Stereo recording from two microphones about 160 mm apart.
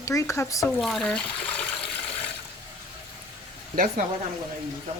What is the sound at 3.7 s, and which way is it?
Speech, 60° right (ahead or behind).